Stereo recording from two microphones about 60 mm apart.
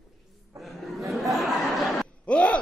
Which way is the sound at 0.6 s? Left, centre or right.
Centre.